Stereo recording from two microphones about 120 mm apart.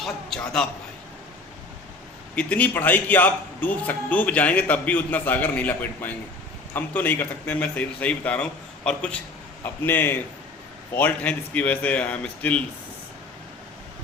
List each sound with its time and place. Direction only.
0.0 s a man's voice: 5° left (ahead or behind)
2.3 s a man's voice: 10° left (ahead or behind)